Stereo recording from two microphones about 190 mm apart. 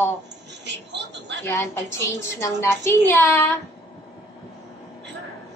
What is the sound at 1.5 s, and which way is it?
A child's voice, 15° left (ahead or behind).